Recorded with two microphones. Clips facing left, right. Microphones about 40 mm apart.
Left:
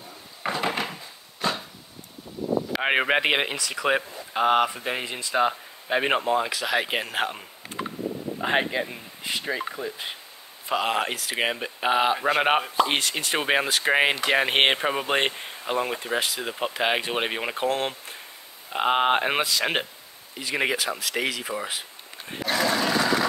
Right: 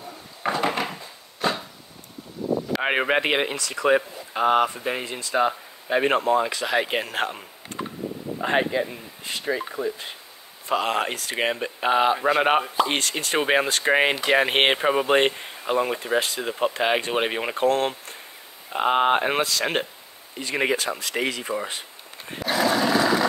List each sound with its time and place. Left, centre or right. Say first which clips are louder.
0.4 s wood: right 3 dB; centre
0.7 s a sound: right 2 dB; centre
2.7 s speech: even; centre
3.5 s speech: right 3 dB; centre
8.5 s speech: right 2 dB; centre
10.7 s speech: right 1 dB; centre
18.7 s speech: right 2 dB; centre
20.3 s speech: right 2 dB; centre
22.6 s a sound: right 3 dB; centre